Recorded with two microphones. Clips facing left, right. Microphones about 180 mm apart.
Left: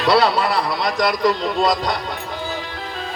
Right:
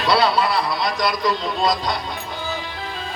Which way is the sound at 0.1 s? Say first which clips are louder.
Left 2 dB; 40° left (ahead or behind).